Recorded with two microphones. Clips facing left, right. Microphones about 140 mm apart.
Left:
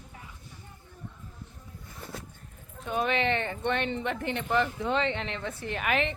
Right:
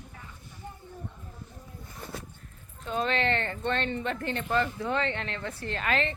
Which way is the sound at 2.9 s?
15° left (ahead or behind).